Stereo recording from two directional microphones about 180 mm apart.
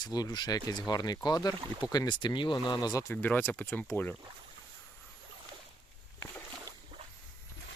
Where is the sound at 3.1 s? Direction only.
10° left (ahead or behind).